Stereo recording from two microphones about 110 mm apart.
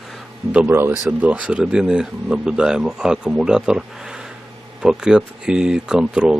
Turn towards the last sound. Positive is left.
turn(degrees=-5)  # may be behind; listen again after turning